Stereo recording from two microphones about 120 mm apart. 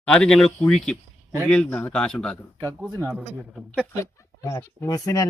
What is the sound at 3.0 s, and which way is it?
Speech, 10° right (ahead or behind).